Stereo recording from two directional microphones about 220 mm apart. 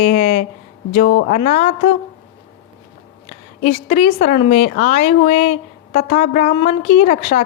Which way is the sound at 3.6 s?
30° left (ahead or behind).